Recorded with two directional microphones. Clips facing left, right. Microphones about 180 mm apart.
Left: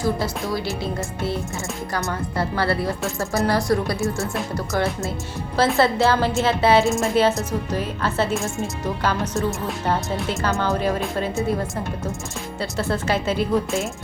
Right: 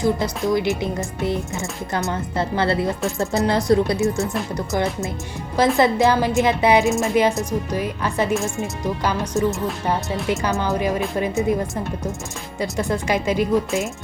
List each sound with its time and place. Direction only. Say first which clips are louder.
0.0 s a woman's voice: right 3 dB; 20° right (ahead or behind)
8.3 s speech: right 2 dB; centre (ahead or behind)
8.8 s a woman's voice: right 1 dB; 15° right (ahead or behind)
12.5 s a woman's voice: right 2 dB; 15° right (ahead or behind)
13.7 s speech: right 1 dB; centre (ahead or behind)